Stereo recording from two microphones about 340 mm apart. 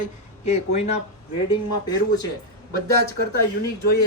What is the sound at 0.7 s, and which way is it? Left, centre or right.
Speech, centre.